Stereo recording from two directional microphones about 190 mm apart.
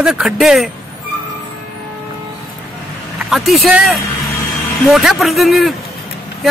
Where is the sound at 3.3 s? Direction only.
Centre (ahead or behind).